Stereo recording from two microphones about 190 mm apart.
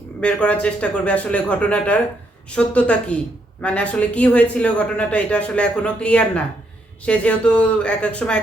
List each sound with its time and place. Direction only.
0.2 s a man's voice: 5° left (ahead or behind)